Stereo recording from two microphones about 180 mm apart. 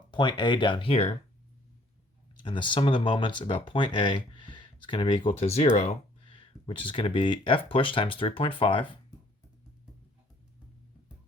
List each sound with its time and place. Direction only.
0.1 s speech: 25° left (ahead or behind)
2.3 s speech: 25° left (ahead or behind)